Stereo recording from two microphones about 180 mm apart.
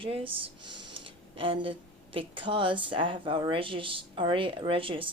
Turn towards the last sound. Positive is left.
turn(degrees=-30)  # may be behind; listen again after turning